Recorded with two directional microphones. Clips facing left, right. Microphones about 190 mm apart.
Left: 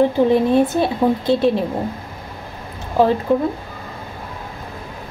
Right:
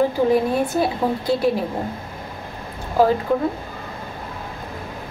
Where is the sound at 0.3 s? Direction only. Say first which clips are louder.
Left 4 dB; 25° left (ahead or behind).